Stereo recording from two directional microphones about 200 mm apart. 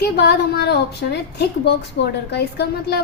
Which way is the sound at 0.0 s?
55° left (ahead or behind).